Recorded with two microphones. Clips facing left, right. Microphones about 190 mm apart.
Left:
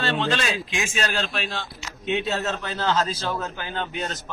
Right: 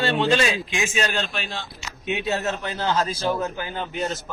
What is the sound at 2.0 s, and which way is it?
A man's voice, 10° right (ahead or behind).